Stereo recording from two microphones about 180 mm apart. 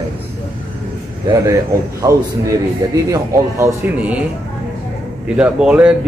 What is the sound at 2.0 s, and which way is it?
A man's voice, 20° right (ahead or behind).